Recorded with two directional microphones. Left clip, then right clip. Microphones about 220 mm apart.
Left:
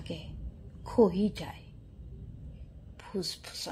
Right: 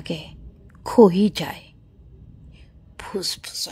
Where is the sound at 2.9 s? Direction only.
40° right (ahead or behind).